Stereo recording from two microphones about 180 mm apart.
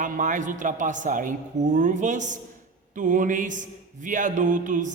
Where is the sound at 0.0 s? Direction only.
45° right (ahead or behind).